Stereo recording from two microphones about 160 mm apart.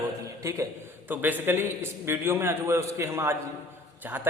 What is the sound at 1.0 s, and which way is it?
A man's voice, 10° right (ahead or behind).